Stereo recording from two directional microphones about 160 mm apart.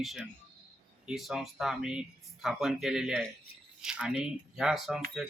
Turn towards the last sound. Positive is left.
turn(degrees=-5)  # may be behind; listen again after turning